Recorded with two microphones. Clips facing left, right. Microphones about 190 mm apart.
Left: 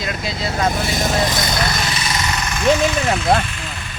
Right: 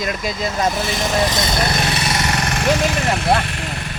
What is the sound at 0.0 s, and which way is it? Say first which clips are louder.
Speech: right 2 dB; 45° right (ahead or behind).